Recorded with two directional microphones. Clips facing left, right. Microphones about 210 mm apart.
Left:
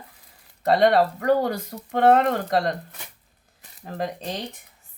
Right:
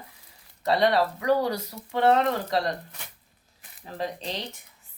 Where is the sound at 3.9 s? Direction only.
50° left (ahead or behind).